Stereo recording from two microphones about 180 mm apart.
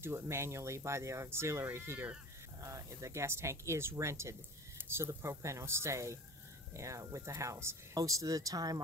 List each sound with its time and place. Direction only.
0.0 s speech: 15° right (ahead or behind)